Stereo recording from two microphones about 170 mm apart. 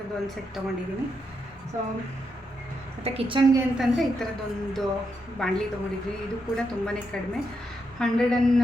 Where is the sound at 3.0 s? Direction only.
30° right (ahead or behind).